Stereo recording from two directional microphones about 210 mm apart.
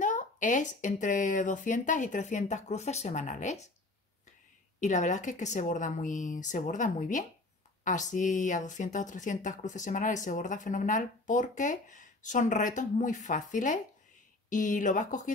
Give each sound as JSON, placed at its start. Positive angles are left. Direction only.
{"t": 0.0, "sound": "speech", "side_deg": 35}
{"t": 4.7, "sound": "speech", "side_deg": 35}